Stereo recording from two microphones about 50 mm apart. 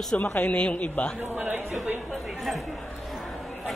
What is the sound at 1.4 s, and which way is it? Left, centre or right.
Speech, right.